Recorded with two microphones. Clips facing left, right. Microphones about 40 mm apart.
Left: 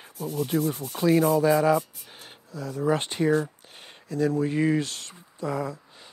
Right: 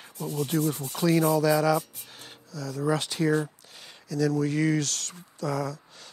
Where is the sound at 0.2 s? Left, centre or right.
Right.